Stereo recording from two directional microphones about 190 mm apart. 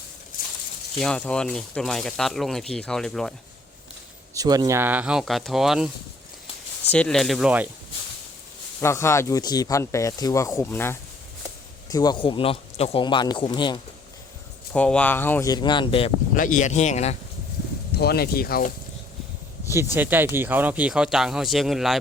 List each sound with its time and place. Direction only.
0.9 s speech: 5° left (ahead or behind)
4.4 s speech: 20° right (ahead or behind); by 5.9 s centre (ahead or behind)
6.9 s speech: 5° left (ahead or behind)
8.8 s a man's voice: 15° left (ahead or behind)
14.7 s speech: 5° left (ahead or behind); by 16.1 s 30° left (ahead or behind)
16.3 s speech: 45° left (ahead or behind)
17.9 s speech: 55° left (ahead or behind)
19.7 s speech: 10° right (ahead or behind)